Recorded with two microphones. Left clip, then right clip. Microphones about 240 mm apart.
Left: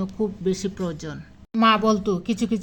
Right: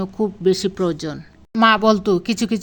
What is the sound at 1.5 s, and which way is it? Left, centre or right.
A woman's voice, right.